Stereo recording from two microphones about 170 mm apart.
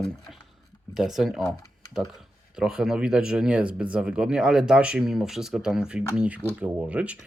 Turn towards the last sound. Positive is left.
turn(degrees=-10)  # may be behind; listen again after turning